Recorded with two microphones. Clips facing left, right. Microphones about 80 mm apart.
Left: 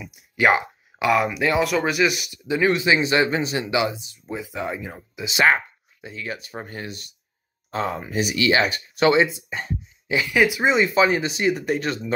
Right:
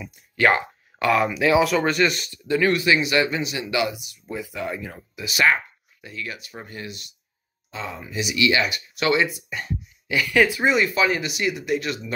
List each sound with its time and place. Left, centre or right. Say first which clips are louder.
0.0 s speech: even; centre; by 12.0 s left